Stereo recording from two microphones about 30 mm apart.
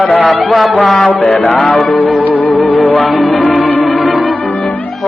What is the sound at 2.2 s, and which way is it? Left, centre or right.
Music, left.